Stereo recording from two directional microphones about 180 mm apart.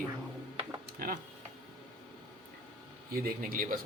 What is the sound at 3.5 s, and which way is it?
Speech, 50° right (ahead or behind).